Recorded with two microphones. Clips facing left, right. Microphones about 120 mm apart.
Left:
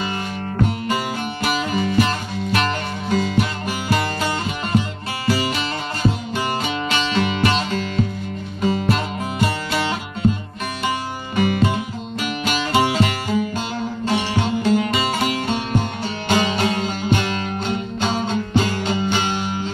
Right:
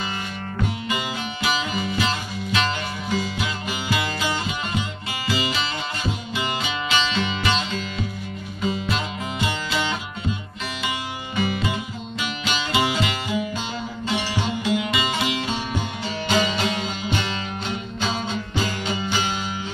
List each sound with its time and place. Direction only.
0.6 s music: 45° left (ahead or behind)